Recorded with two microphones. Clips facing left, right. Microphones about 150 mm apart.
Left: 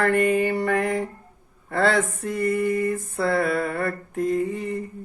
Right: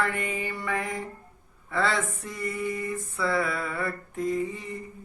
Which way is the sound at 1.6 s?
55° left (ahead or behind).